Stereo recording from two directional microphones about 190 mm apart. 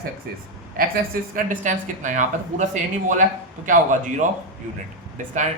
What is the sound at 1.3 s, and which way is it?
Speech, 45° right (ahead or behind).